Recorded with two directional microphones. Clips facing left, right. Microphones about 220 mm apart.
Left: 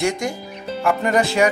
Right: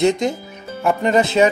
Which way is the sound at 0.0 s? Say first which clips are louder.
Right 5 dB; 20° right (ahead or behind).